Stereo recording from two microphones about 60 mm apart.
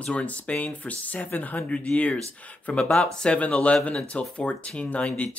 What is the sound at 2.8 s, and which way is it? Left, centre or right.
Speech, centre.